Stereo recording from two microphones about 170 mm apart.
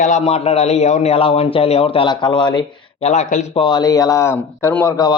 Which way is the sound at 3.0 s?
40° left (ahead or behind).